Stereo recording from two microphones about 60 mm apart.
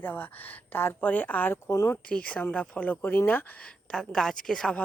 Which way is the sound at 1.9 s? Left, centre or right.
Left.